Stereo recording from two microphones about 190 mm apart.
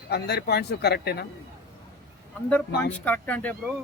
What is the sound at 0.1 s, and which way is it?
A man's voice, 60° left (ahead or behind).